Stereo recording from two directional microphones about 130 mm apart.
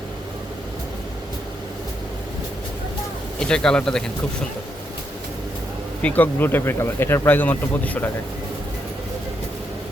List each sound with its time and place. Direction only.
3.4 s speech: 5° left (ahead or behind)
6.0 s speech: 10° left (ahead or behind)